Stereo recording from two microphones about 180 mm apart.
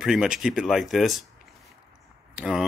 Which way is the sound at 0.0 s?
5° right (ahead or behind).